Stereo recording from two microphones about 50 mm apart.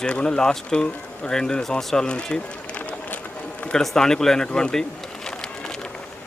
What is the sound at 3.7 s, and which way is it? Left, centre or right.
Speech, centre.